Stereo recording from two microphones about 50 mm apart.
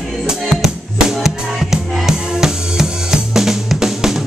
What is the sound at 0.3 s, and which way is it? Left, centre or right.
Music, centre.